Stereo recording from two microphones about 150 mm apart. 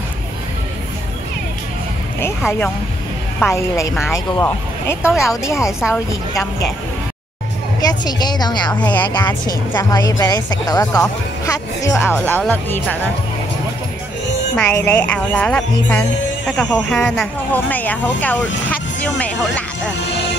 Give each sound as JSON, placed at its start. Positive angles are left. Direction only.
{"t": 3.3, "sound": "a woman's voice", "side_deg": 20}
{"t": 5.7, "sound": "speech", "side_deg": -5}
{"t": 7.8, "sound": "a woman's voice", "side_deg": 25}
{"t": 14.5, "sound": "speech", "side_deg": 15}